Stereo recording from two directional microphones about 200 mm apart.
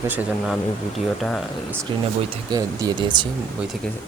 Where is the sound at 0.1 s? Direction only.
5° right (ahead or behind).